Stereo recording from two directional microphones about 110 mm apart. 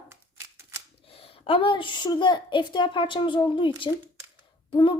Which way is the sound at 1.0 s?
60° left (ahead or behind).